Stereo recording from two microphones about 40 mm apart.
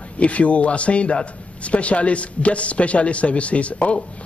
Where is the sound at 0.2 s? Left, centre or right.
Left.